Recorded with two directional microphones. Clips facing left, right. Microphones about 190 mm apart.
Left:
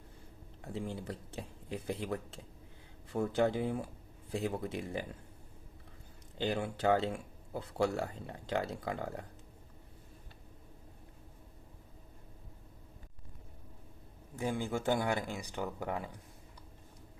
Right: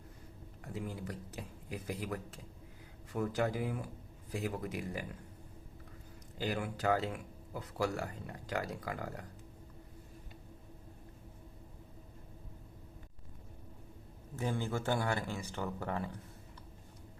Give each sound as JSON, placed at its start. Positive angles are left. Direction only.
{"t": 0.6, "sound": "speech", "side_deg": 25}
{"t": 6.4, "sound": "speech", "side_deg": 25}
{"t": 14.3, "sound": "speech", "side_deg": 15}